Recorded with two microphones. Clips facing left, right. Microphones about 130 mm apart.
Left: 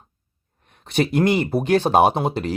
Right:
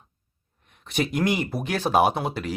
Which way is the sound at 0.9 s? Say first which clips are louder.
Left 5 dB; 30° left (ahead or behind).